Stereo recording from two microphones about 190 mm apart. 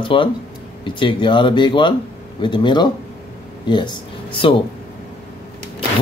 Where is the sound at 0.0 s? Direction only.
25° left (ahead or behind).